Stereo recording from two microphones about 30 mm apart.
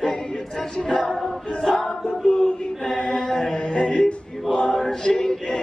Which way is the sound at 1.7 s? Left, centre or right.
Centre.